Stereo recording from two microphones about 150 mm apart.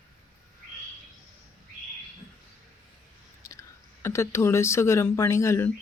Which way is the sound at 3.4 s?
20° left (ahead or behind).